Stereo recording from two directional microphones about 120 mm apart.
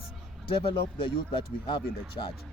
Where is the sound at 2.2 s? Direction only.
60° left (ahead or behind).